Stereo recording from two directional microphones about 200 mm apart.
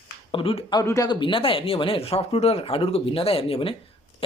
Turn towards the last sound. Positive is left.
turn(degrees=25)  # may be behind; listen again after turning